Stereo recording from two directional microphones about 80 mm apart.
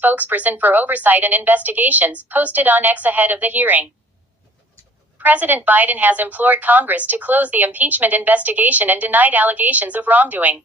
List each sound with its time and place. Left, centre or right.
0.0 s a woman's voice: right
5.1 s a woman's voice: right